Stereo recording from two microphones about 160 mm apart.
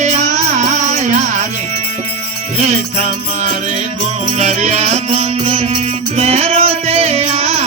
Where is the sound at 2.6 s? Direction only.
45° right (ahead or behind).